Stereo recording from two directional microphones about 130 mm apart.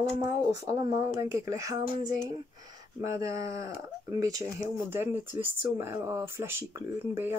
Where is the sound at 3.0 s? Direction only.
25° right (ahead or behind).